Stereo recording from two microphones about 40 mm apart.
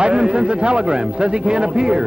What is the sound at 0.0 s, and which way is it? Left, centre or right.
A man's voice, right.